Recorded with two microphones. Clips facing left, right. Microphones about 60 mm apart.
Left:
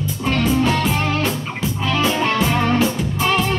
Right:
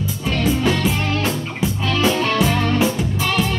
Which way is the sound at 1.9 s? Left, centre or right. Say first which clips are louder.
Even; left.